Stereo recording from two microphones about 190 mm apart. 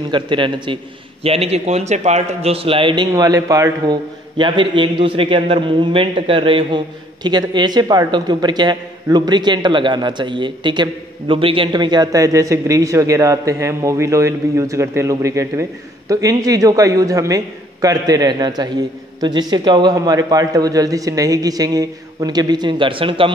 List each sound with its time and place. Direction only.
0.1 s a man's voice: 25° right (ahead or behind)